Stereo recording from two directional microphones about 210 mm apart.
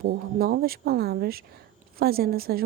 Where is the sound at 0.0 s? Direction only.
45° right (ahead or behind).